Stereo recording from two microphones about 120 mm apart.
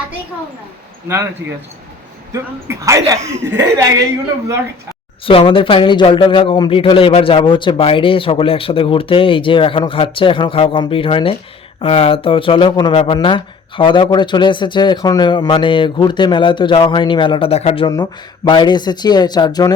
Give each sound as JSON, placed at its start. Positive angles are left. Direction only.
{"t": 2.3, "sound": "speech", "side_deg": -25}
{"t": 5.2, "sound": "a man's voice", "side_deg": 50}
{"t": 17.5, "sound": "speech", "side_deg": 60}
{"t": 17.8, "sound": "speech", "side_deg": 35}